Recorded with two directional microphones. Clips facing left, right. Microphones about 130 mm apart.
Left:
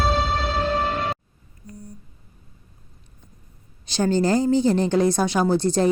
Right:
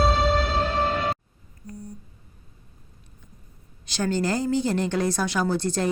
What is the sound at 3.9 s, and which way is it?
Speech, 25° left (ahead or behind).